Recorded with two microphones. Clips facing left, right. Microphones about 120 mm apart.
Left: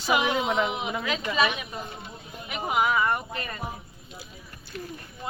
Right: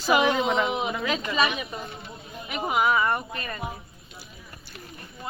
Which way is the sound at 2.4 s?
10° left (ahead or behind).